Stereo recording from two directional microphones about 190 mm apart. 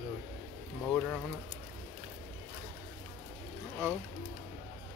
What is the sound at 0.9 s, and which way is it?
Speech, 5° left (ahead or behind).